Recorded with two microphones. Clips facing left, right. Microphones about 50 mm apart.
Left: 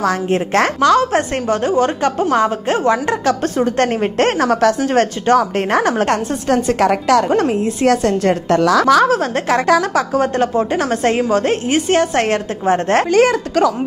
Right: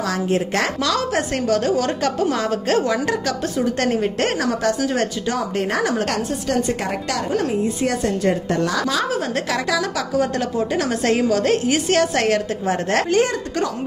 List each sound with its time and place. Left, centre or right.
0.0 s a woman's voice: left
6.5 s a woman's voice: left
8.8 s a woman's voice: left